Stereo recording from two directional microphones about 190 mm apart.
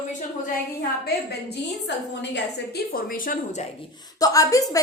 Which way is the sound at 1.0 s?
65° left (ahead or behind).